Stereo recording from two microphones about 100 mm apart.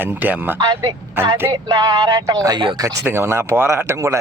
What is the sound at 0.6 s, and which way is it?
Speech, 40° right (ahead or behind).